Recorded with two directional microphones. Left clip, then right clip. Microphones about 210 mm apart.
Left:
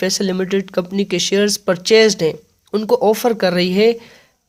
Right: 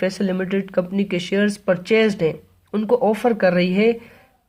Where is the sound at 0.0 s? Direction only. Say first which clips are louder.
Left 4 dB; 35° left (ahead or behind).